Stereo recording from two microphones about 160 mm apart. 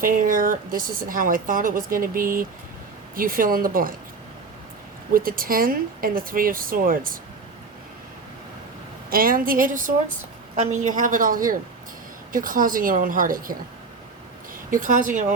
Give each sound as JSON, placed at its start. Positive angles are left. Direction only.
{"t": 0.0, "sound": "speech", "side_deg": -60}
{"t": 5.1, "sound": "speech", "side_deg": -65}
{"t": 9.0, "sound": "speech", "side_deg": -65}
{"t": 14.7, "sound": "a woman's voice", "side_deg": -55}